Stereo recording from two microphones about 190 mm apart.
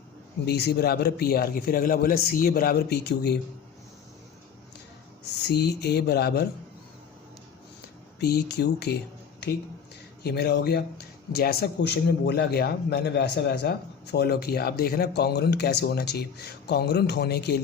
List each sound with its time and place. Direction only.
0.4 s a man's voice: 60° left (ahead or behind)
5.4 s a man's voice: 60° left (ahead or behind)
8.2 s a man's voice: 60° left (ahead or behind)
10.2 s a man's voice: 60° left (ahead or behind)